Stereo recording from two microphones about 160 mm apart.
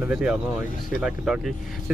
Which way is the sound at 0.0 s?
5° right (ahead or behind).